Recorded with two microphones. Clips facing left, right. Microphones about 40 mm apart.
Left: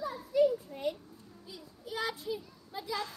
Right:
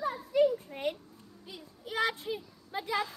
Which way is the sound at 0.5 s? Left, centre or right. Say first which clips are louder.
Right 1 dB; right.